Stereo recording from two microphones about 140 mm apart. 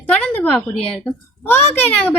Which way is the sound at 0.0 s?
15° left (ahead or behind).